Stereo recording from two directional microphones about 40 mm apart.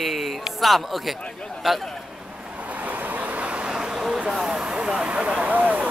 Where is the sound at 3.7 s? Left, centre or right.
Centre.